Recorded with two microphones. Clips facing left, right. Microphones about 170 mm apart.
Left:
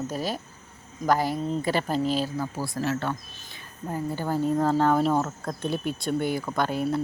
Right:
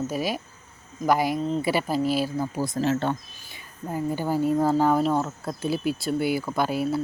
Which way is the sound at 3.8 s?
10° right (ahead or behind).